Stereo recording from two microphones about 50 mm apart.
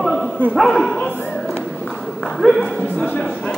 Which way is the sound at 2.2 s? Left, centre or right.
Centre.